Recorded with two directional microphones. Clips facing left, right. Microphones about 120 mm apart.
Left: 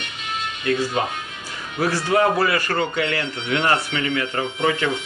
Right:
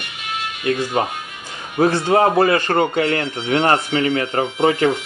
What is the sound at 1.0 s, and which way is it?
Speech, 35° right (ahead or behind).